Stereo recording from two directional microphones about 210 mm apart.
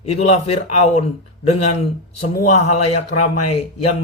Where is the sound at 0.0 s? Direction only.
30° left (ahead or behind).